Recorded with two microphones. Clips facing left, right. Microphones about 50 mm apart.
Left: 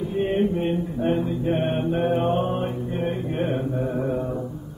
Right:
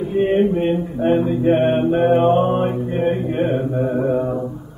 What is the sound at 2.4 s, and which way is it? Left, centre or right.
Mantra, centre.